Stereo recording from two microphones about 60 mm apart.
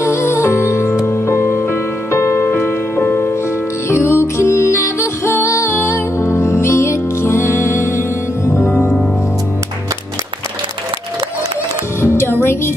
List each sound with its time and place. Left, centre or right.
0.0 s music: left
3.9 s music: left
12.0 s music: left